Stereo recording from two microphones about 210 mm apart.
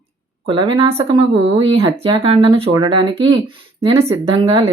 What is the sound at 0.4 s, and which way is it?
Speech, 25° right (ahead or behind).